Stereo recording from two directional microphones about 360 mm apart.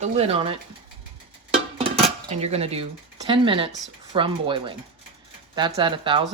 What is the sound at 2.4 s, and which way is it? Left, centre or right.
Speech, centre.